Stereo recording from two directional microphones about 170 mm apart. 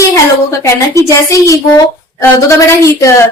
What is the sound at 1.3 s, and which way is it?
A woman's voice, 20° left (ahead or behind).